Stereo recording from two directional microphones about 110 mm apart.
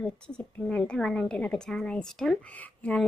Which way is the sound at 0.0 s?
10° left (ahead or behind).